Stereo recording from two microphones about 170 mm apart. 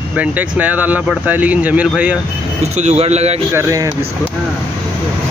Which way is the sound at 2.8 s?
40° right (ahead or behind).